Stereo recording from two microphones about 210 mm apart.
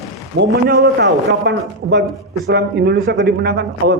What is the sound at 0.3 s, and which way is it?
A man's voice, 55° right (ahead or behind).